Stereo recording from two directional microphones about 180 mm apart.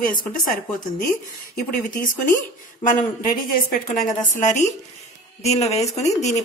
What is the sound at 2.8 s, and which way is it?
A woman's voice, 50° left (ahead or behind).